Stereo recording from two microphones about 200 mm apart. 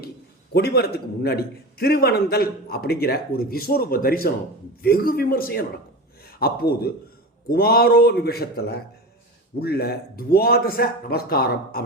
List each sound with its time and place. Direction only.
0.5 s a man's voice: 55° left (ahead or behind)